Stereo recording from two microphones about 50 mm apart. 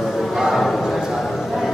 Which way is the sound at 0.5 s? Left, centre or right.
Centre.